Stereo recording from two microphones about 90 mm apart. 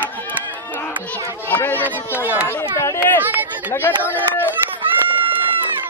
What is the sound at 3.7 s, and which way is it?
Speech, 25° left (ahead or behind).